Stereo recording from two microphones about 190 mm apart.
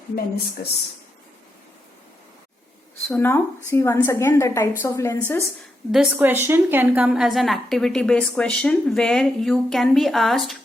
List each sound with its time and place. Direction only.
0.6 s speech: 50° left (ahead or behind)
3.1 s a woman's voice: 10° left (ahead or behind)
5.9 s a woman's voice: 5° right (ahead or behind)